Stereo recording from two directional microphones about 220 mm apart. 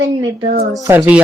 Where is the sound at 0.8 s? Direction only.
10° right (ahead or behind).